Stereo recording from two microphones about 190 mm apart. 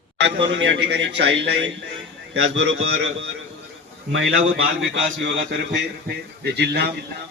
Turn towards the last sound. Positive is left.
turn(degrees=-60)  # may be behind; listen again after turning